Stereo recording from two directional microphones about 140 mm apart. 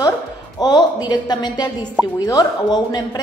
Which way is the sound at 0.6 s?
30° left (ahead or behind).